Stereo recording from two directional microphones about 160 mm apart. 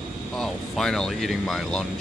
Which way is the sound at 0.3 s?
Centre (ahead or behind).